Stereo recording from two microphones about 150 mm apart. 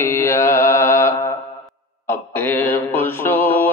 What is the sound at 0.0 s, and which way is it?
Mantra, 15° left (ahead or behind).